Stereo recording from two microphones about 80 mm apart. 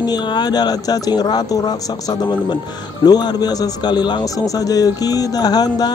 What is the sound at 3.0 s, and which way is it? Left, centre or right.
A man's voice, left.